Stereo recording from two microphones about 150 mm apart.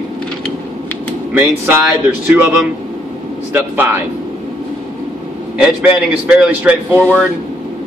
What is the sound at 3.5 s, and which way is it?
Speech, 15° right (ahead or behind).